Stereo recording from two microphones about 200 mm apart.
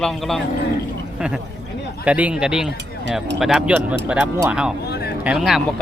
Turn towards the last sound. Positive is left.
turn(degrees=0)  # may be behind; listen again after turning